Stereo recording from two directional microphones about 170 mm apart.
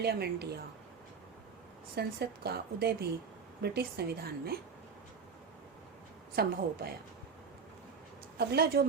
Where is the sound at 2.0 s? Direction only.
70° right (ahead or behind).